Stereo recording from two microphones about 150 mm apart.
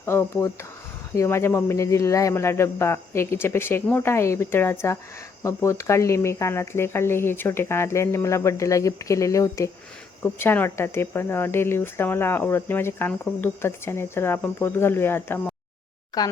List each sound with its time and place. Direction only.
0.0 s speech: 15° left (ahead or behind)